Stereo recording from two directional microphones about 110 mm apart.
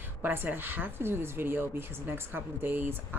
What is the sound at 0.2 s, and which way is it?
Speech, 20° right (ahead or behind).